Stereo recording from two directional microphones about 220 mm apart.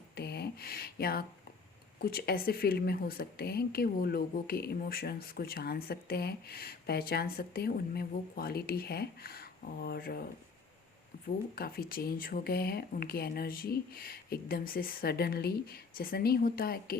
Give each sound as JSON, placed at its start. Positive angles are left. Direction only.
{"t": 0.2, "sound": "a sound", "side_deg": 45}
{"t": 2.0, "sound": "speech", "side_deg": 45}
{"t": 11.5, "sound": "speech", "side_deg": 45}